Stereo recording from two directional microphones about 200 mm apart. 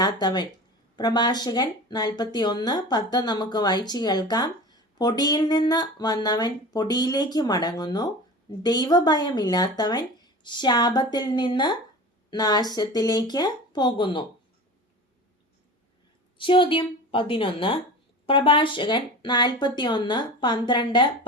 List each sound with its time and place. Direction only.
0.0 s a woman's voice: 20° left (ahead or behind)
16.4 s a woman's voice: 25° left (ahead or behind)